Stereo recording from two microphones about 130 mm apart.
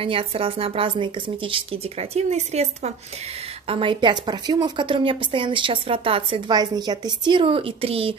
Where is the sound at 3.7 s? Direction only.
40° right (ahead or behind).